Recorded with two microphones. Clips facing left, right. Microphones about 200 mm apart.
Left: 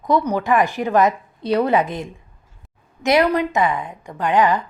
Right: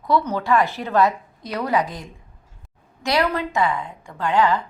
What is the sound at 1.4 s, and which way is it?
A woman's voice, 30° left (ahead or behind).